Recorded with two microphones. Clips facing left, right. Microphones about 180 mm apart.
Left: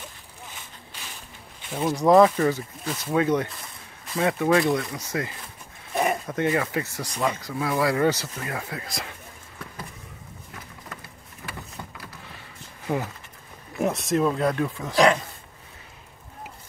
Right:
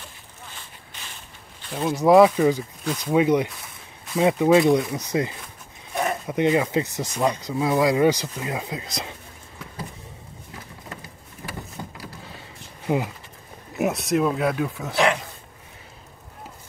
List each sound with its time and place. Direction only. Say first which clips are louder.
1.7 s speech: right 2 dB; centre (ahead or behind)
3.6 s a sound: even; centre (ahead or behind)
4.2 s speech: right 4 dB; 20° right (ahead or behind)
12.8 s speech: right 3 dB; 15° right (ahead or behind)
13.7 s speech: right 1 dB; centre (ahead or behind)